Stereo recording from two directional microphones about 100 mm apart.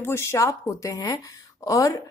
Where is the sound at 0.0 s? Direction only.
25° left (ahead or behind).